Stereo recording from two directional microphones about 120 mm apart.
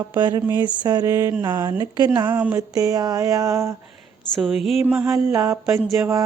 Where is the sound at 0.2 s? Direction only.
35° right (ahead or behind).